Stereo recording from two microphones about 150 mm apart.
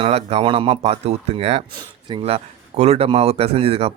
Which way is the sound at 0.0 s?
40° right (ahead or behind).